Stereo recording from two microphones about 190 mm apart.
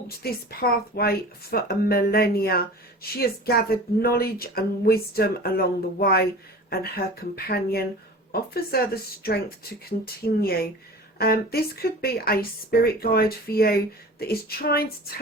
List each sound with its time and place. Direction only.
0.2 s speech: 55° left (ahead or behind)